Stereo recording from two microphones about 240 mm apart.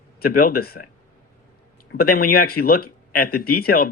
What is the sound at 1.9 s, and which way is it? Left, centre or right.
Speech, left.